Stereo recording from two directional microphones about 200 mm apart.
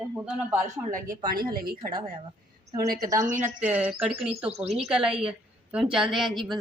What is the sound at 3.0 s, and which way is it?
Speech, 15° right (ahead or behind).